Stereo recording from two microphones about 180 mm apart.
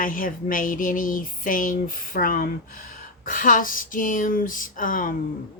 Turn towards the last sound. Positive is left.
turn(degrees=50)  # may be behind; listen again after turning